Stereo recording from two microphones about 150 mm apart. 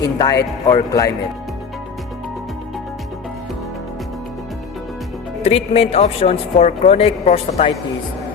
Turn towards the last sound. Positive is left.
turn(degrees=40)  # may be behind; listen again after turning